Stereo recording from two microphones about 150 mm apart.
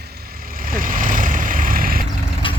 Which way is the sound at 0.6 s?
70° right (ahead or behind).